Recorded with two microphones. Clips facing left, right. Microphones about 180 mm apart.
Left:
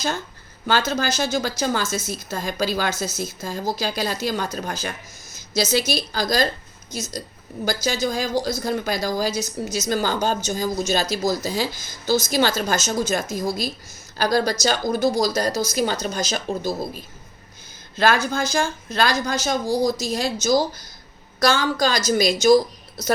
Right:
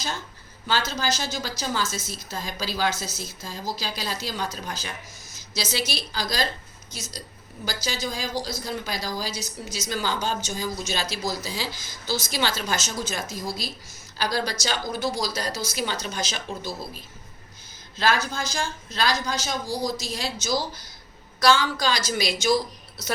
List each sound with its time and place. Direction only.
0.7 s speech: 50° left (ahead or behind)